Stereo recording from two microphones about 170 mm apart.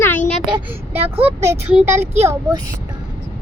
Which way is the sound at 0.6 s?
10° right (ahead or behind).